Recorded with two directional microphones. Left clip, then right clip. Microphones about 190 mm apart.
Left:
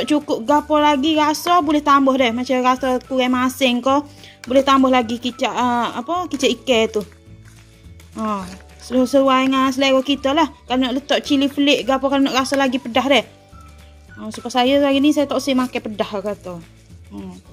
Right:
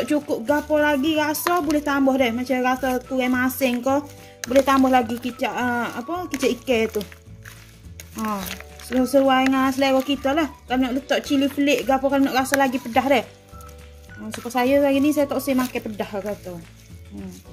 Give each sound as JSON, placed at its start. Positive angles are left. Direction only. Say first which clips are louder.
{"t": 0.1, "sound": "speech", "louder": "left 6 dB", "side_deg": 40}
{"t": 9.2, "sound": "speech", "louder": "left 3 dB", "side_deg": 45}
{"t": 14.5, "sound": "speech", "louder": "left 3 dB", "side_deg": 40}
{"t": 17.1, "sound": "speech", "louder": "left 4 dB", "side_deg": 50}